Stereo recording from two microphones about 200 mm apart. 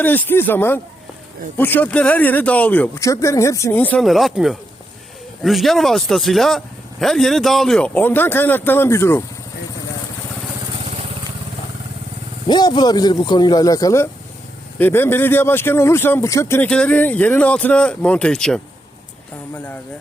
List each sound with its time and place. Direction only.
0.0 s speech: 10° left (ahead or behind)
12.5 s speech: 20° left (ahead or behind); by 18.6 s 5° left (ahead or behind)